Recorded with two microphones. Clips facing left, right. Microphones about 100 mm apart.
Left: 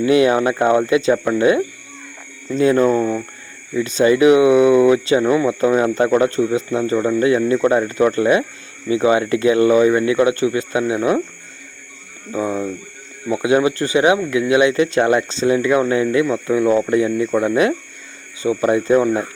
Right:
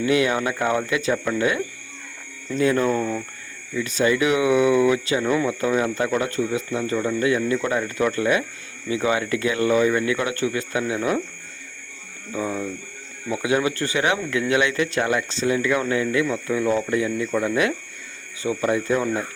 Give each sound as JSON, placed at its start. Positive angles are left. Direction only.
{"t": 0.0, "sound": "speech", "side_deg": 25}
{"t": 12.3, "sound": "speech", "side_deg": 25}